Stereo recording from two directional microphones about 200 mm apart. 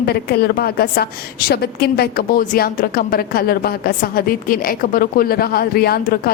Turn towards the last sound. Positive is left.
turn(degrees=50)  # may be behind; listen again after turning